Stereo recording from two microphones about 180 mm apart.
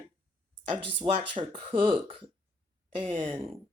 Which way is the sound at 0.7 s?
30° right (ahead or behind).